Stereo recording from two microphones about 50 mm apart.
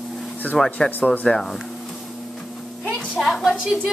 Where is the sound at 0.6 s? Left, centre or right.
Centre.